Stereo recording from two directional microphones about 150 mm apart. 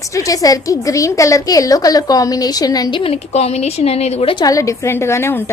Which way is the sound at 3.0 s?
40° left (ahead or behind).